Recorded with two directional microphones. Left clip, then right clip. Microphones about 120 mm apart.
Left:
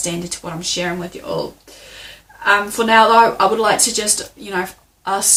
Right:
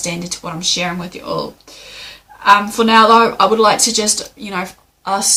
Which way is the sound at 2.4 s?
20° right (ahead or behind).